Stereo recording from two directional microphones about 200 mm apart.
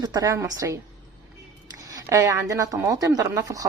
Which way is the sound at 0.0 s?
20° right (ahead or behind).